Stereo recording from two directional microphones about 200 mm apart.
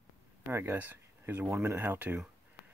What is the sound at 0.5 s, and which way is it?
Speech, 10° right (ahead or behind).